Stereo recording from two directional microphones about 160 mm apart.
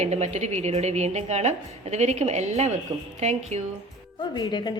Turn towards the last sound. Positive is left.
turn(degrees=25)  # may be behind; listen again after turning